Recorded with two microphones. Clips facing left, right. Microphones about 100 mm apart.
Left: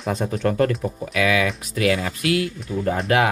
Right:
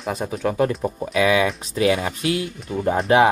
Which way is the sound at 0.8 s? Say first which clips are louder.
Right 2 dB; 25° right (ahead or behind).